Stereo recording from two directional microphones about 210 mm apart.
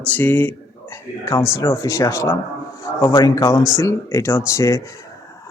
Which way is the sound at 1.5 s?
15° left (ahead or behind).